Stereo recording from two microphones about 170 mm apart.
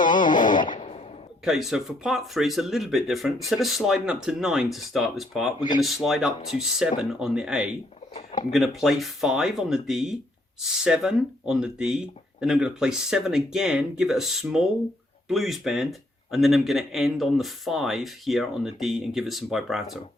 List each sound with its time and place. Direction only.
0.0 s music: 50° left (ahead or behind)
1.5 s speech: centre (ahead or behind)